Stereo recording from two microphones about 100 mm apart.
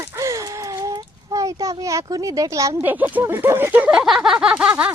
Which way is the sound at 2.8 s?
20° right (ahead or behind).